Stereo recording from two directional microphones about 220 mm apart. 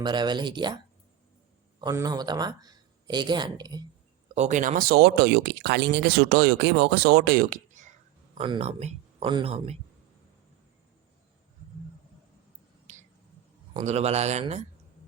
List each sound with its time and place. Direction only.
0.0 s speech: 20° right (ahead or behind)
1.8 s speech: 15° right (ahead or behind)
4.4 s speech: 35° right (ahead or behind)
12.9 s a sound: 30° right (ahead or behind)
13.7 s speech: 30° right (ahead or behind)